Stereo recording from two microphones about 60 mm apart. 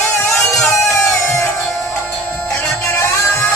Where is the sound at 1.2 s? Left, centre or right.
Left.